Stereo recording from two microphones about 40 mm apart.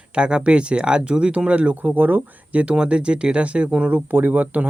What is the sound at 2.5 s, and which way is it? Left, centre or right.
Speech, right.